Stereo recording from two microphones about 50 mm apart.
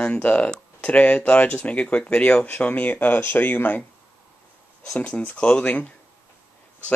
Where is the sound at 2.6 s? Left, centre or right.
Left.